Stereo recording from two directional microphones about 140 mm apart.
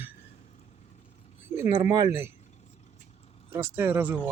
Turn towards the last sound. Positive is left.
turn(degrees=-15)  # may be behind; listen again after turning